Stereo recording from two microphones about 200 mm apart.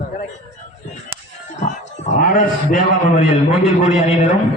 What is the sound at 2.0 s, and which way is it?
A man's voice, 40° left (ahead or behind).